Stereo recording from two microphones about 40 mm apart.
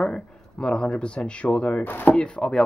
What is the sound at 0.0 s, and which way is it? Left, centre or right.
Speech, centre.